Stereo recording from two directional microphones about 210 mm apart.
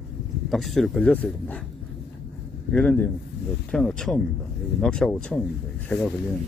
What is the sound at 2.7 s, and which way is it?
Speech, 5° left (ahead or behind).